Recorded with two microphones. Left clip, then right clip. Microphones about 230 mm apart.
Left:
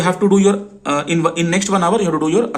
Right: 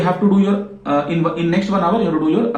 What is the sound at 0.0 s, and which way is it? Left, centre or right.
Speech, left.